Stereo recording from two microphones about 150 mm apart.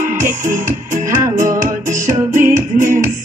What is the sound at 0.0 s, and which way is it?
Music, 65° right (ahead or behind).